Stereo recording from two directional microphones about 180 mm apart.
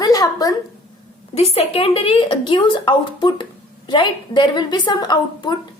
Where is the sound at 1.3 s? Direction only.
35° left (ahead or behind).